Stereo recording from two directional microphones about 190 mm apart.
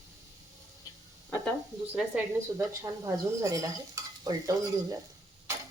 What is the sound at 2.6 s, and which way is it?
Speech, 15° right (ahead or behind).